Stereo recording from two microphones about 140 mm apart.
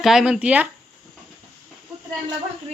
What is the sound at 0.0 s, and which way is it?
Speech, 5° right (ahead or behind).